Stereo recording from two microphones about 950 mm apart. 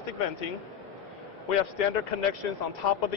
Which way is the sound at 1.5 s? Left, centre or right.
Left.